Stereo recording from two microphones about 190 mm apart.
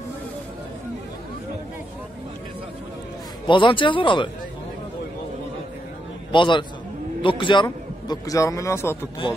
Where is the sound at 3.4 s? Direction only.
25° left (ahead or behind).